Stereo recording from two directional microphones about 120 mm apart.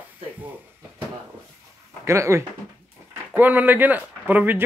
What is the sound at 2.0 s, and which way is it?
Speech, 25° right (ahead or behind).